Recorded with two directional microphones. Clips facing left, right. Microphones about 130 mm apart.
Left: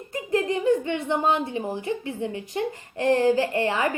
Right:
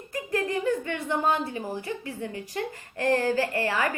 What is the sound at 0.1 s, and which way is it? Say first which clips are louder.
Speech: left 4 dB; 20° left (ahead or behind).